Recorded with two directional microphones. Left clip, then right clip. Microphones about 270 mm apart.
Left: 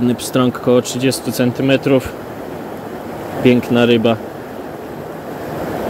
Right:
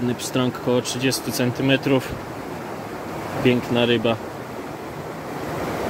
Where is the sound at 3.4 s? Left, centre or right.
Centre.